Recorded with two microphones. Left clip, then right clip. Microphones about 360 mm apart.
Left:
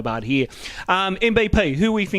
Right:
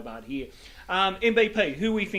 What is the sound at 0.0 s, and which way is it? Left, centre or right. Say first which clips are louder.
A man's voice: left 14 dB; left.